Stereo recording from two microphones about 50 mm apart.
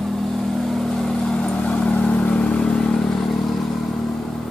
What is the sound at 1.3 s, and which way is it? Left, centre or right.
Vehicle, centre.